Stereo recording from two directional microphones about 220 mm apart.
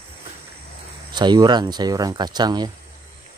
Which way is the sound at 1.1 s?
20° right (ahead or behind).